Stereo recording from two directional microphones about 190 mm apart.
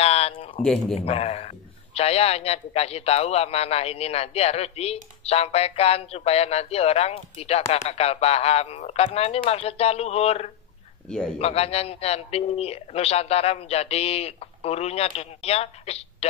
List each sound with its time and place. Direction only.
0.0 s a sound: 30° left (ahead or behind)
0.6 s speech: 5° left (ahead or behind)
0.9 s a man's voice: 35° left (ahead or behind)
11.1 s speech: 5° left (ahead or behind)
11.3 s a man's voice: 30° left (ahead or behind)